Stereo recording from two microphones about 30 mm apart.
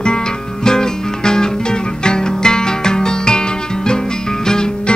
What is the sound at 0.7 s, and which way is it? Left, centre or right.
Music, left.